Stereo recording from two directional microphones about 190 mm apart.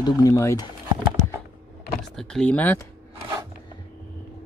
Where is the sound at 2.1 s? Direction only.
5° left (ahead or behind).